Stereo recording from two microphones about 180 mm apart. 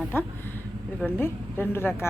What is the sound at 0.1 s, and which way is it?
A woman's voice, 10° left (ahead or behind).